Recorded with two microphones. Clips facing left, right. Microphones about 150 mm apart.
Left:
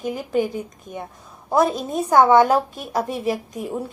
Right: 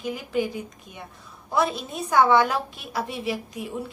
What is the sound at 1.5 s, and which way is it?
A woman's voice, 45° left (ahead or behind).